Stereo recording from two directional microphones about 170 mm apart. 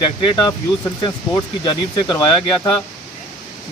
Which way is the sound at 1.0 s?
25° left (ahead or behind).